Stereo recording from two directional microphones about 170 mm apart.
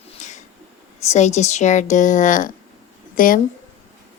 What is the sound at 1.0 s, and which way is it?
A woman's voice, 40° left (ahead or behind).